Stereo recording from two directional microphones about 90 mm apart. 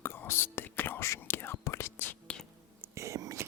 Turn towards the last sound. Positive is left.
turn(degrees=-35)  # may be behind; listen again after turning